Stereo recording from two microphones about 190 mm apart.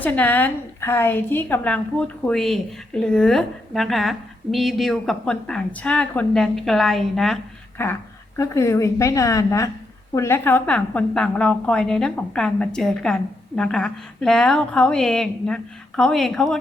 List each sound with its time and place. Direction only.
0.0 s a woman's voice: 10° left (ahead or behind)